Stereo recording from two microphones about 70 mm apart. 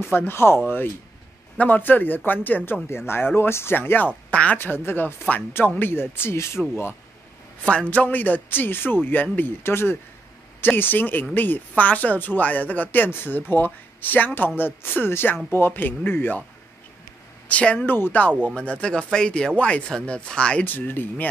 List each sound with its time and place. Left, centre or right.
0.0 s speech: left
1.6 s speech: left
4.6 s speech: left
7.9 s speech: left
17.5 s a woman's voice: centre
17.8 s speech: left
18.4 s speech: centre
20.6 s speech: left